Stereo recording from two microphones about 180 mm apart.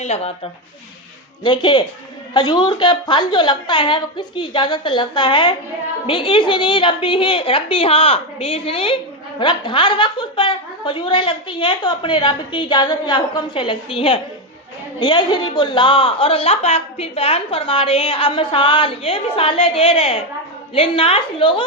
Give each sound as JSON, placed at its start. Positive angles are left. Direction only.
{"t": 0.0, "sound": "a woman's voice", "side_deg": 35}
{"t": 1.5, "sound": "a woman's voice", "side_deg": 25}